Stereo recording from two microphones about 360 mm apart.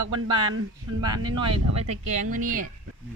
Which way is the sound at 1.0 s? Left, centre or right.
Centre.